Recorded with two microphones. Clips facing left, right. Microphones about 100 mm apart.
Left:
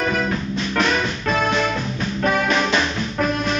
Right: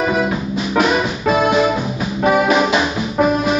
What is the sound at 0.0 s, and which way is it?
Music, 15° right (ahead or behind).